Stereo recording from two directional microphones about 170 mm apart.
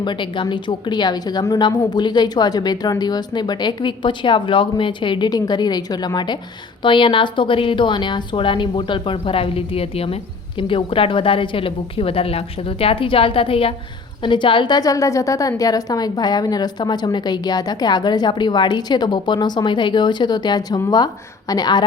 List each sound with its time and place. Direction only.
0.0 s a woman's voice: 30° left (ahead or behind)